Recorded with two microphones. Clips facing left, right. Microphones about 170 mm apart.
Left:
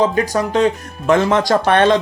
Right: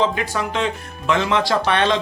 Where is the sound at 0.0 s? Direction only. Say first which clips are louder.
Left 5 dB; 40° left (ahead or behind).